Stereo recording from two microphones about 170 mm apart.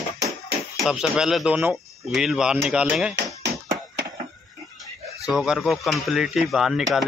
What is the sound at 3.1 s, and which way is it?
Music, 90° right.